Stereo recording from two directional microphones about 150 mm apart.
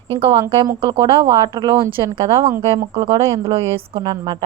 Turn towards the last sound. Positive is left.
turn(degrees=-25)  # may be behind; listen again after turning